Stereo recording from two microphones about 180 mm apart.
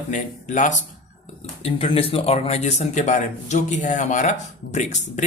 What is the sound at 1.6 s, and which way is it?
A man's voice, 30° left (ahead or behind).